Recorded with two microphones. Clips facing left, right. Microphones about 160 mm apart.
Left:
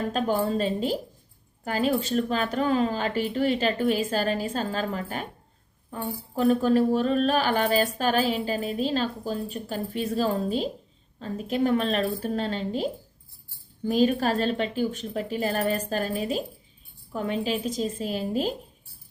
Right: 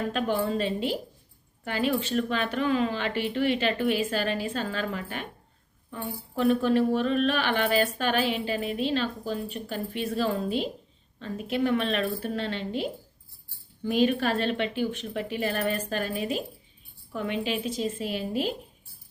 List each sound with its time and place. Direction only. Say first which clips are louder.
0.1 s speech: left 3 dB; 40° left (ahead or behind)